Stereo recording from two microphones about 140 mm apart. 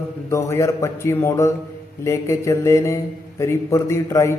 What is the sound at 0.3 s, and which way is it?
A man's voice, 20° left (ahead or behind).